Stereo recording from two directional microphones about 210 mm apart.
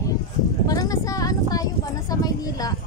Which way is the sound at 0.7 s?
15° left (ahead or behind).